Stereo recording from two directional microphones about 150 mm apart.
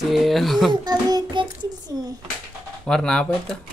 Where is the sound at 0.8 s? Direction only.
30° right (ahead or behind).